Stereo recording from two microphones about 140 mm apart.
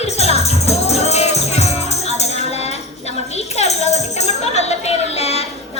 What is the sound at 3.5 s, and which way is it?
Music, 50° left (ahead or behind).